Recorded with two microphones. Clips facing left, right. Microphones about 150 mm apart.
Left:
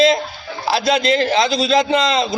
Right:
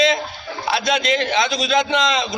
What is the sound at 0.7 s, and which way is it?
Speech, 30° left (ahead or behind).